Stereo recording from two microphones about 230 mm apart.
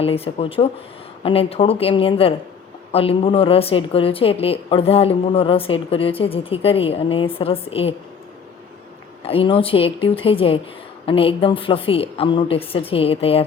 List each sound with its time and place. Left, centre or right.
0.0 s a woman's voice: left
9.2 s a woman's voice: left